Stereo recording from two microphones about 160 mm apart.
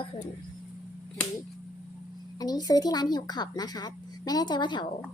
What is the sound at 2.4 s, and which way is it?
Speech, 25° left (ahead or behind).